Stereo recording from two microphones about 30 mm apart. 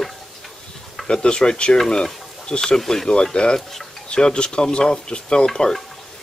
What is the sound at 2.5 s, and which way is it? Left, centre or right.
Speech, left.